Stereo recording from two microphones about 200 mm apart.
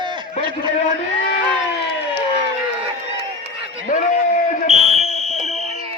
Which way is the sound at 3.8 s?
40° left (ahead or behind).